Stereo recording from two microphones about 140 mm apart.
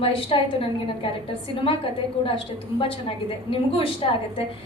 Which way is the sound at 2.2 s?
40° left (ahead or behind).